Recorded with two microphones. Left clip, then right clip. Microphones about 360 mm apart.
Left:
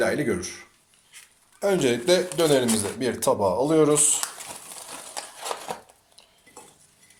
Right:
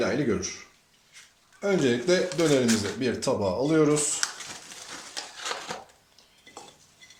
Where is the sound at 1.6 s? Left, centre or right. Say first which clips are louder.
Left 3 dB; left.